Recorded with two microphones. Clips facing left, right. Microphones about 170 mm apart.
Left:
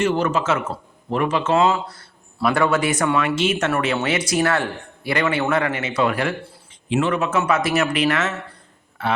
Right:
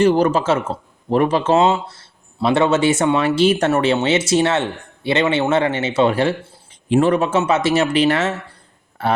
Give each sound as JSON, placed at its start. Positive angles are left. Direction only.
{"t": 0.0, "sound": "speech", "side_deg": -35}
{"t": 6.8, "sound": "a man's voice", "side_deg": -50}
{"t": 7.1, "sound": "speech", "side_deg": -30}